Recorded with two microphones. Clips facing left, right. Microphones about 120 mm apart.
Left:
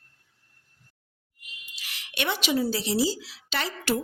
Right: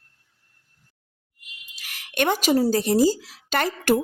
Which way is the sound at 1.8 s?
50° right (ahead or behind).